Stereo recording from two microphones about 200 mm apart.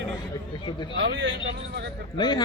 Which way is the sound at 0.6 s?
20° left (ahead or behind).